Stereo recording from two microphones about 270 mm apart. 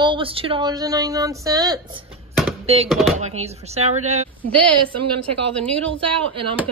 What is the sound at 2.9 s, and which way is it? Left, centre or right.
Speech, centre.